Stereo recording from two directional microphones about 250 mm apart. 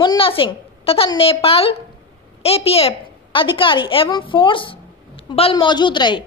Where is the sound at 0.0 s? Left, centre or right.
Centre.